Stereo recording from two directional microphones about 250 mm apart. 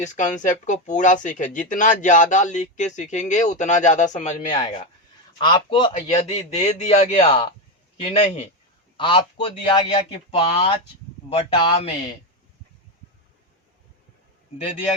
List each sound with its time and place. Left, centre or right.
0.0 s speech: left
5.4 s speech: centre
14.6 s speech: left